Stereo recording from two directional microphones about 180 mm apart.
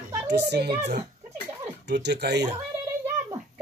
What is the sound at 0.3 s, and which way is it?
Speech, 65° right (ahead or behind).